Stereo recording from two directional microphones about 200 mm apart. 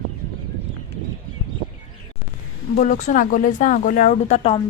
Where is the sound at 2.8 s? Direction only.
40° left (ahead or behind).